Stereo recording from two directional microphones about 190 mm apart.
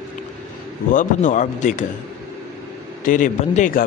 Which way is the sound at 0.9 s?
45° left (ahead or behind).